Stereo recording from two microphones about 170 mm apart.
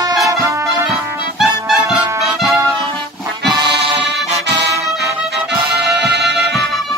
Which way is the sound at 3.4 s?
25° right (ahead or behind).